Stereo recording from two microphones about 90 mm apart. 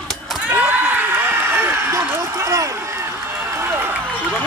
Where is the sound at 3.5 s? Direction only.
25° right (ahead or behind).